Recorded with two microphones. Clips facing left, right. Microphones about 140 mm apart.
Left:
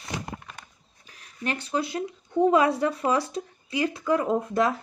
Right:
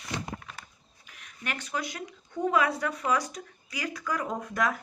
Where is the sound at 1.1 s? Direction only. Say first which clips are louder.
Left 6 dB; 30° left (ahead or behind).